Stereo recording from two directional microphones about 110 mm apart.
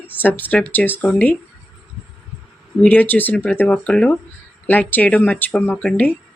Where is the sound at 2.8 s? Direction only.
15° left (ahead or behind).